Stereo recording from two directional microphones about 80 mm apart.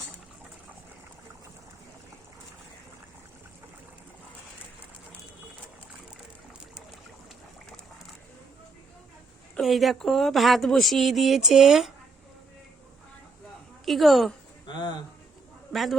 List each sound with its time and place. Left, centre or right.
9.6 s a woman's voice: centre
13.8 s a woman's voice: centre
14.7 s speech: left
15.7 s a man's voice: centre